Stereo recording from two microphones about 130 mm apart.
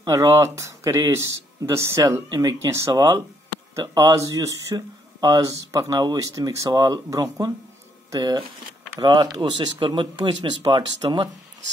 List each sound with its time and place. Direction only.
0.0 s speech: 25° right (ahead or behind)